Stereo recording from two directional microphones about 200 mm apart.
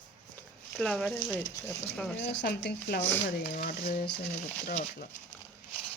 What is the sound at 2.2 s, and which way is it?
Speech, 55° left (ahead or behind).